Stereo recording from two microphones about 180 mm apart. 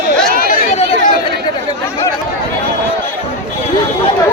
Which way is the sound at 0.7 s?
40° left (ahead or behind).